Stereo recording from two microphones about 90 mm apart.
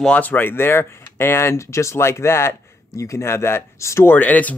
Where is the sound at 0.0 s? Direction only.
15° left (ahead or behind).